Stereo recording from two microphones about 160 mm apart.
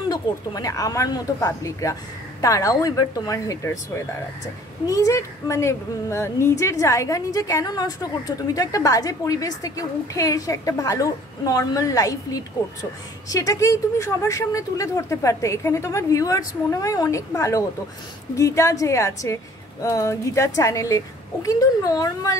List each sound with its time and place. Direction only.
0.1 s a woman's voice: 25° left (ahead or behind)